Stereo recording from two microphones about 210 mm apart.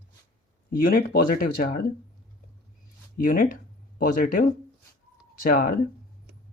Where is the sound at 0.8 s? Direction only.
45° left (ahead or behind).